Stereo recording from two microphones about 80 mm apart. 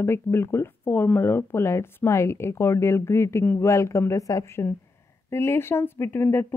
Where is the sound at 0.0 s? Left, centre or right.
Left.